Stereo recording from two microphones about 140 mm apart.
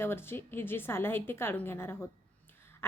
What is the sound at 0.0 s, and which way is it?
A woman's voice, 15° left (ahead or behind).